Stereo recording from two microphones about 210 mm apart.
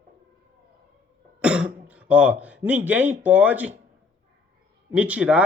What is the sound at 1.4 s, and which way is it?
Speech, 5° right (ahead or behind).